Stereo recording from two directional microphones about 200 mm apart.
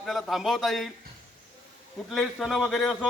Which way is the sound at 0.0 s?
Centre (ahead or behind).